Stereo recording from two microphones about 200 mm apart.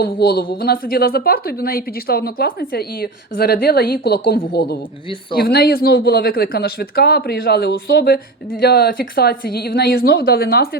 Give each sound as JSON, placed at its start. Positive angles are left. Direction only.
{"t": 0.0, "sound": "a woman's voice", "side_deg": 45}